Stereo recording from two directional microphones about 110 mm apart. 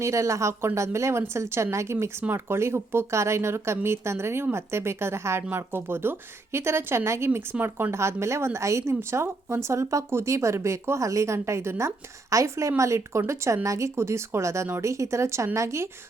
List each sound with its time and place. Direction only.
0.0 s a woman's voice: 25° right (ahead or behind)